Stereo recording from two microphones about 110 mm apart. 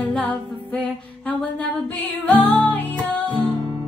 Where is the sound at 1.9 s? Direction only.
15° left (ahead or behind).